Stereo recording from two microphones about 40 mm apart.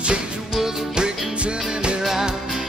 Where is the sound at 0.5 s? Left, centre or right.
Centre.